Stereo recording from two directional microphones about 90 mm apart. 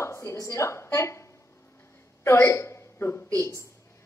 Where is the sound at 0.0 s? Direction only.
35° left (ahead or behind).